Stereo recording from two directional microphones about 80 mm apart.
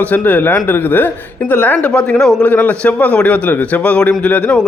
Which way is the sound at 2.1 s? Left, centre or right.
Centre.